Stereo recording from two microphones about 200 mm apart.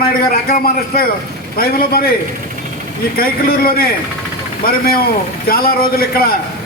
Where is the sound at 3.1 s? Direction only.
50° left (ahead or behind).